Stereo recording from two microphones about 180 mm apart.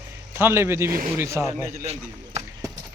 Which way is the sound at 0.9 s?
50° right (ahead or behind).